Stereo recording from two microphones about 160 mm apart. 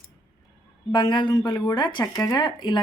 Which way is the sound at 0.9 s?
30° left (ahead or behind).